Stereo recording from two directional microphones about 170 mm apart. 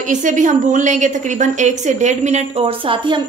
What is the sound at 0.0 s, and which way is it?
A woman's voice, 50° right (ahead or behind).